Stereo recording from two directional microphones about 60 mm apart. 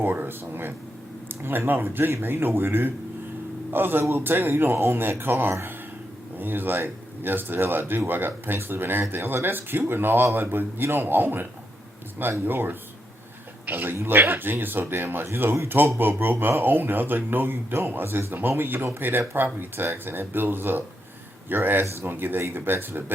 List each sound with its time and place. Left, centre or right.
0.0 s speech: right
12.5 s speech: right